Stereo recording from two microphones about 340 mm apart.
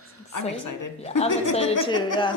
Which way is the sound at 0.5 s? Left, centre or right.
Left.